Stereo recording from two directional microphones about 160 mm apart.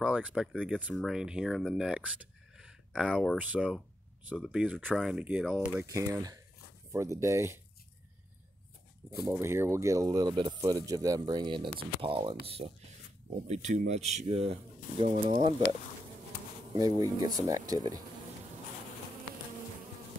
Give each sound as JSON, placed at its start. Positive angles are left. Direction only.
{"t": 0.0, "sound": "speech", "side_deg": -5}
{"t": 9.1, "sound": "speech", "side_deg": -15}
{"t": 13.5, "sound": "speech", "side_deg": -45}
{"t": 16.7, "sound": "speech", "side_deg": -25}